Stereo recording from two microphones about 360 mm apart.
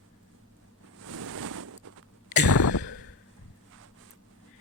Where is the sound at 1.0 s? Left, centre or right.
Right.